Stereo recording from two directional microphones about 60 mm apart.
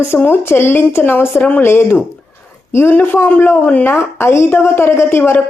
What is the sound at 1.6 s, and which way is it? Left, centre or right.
A woman's voice, left.